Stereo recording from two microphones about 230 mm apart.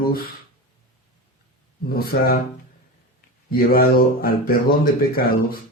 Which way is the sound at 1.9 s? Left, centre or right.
Left.